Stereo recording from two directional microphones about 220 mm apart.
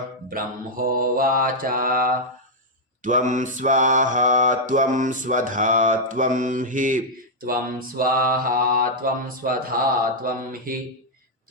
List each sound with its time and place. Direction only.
0.3 s mantra: 40° right (ahead or behind)